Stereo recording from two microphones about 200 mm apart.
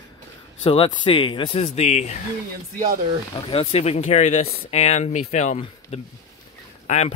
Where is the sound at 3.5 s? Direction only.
30° left (ahead or behind).